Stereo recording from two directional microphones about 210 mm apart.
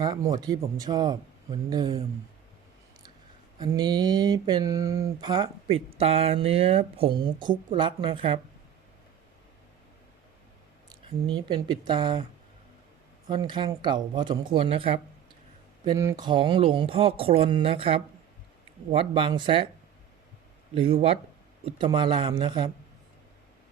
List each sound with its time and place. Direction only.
0.0 s speech: 15° right (ahead or behind)
3.6 s speech: 20° right (ahead or behind)
11.3 s speech: 20° right (ahead or behind)
13.2 s speech: 20° right (ahead or behind)
15.8 s speech: 15° right (ahead or behind)
20.7 s speech: 25° right (ahead or behind)